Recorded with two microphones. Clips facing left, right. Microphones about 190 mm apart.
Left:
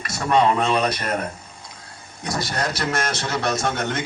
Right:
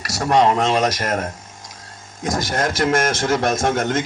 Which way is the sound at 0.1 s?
80° right.